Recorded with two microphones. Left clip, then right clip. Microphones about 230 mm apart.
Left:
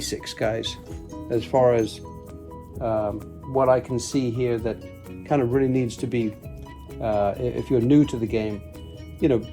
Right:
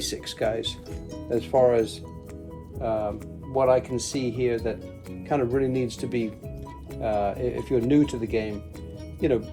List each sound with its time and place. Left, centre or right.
0.0 s speech: left